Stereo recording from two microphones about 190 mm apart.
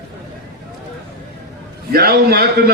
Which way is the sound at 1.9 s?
55° right (ahead or behind).